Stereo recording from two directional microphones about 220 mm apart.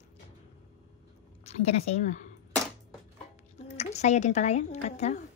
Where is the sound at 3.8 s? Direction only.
30° left (ahead or behind).